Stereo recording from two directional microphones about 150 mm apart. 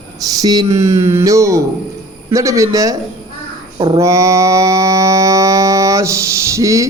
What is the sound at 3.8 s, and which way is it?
Mantra, 25° right (ahead or behind).